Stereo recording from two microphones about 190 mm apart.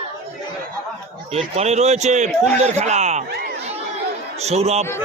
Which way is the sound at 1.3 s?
35° right (ahead or behind).